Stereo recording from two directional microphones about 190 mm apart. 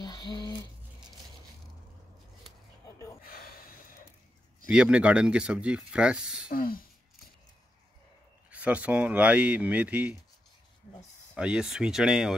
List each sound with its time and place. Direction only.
0.0 s a sound: 25° left (ahead or behind)
3.2 s gasp: 50° left (ahead or behind)
4.6 s speech: 5° right (ahead or behind)
6.5 s speech: 50° left (ahead or behind)
8.5 s speech: 5° right (ahead or behind)
11.3 s speech: 5° right (ahead or behind)